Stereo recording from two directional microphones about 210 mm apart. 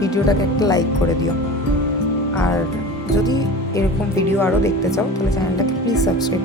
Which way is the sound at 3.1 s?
15° left (ahead or behind).